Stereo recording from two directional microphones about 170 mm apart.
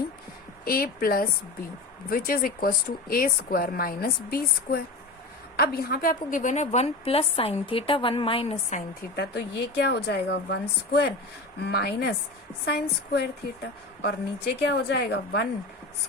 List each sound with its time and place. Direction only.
0.6 s a woman's voice: 60° left (ahead or behind); by 8.5 s 35° left (ahead or behind)
9.1 s a woman's voice: 75° left (ahead or behind)
14.0 s a woman's voice: 80° left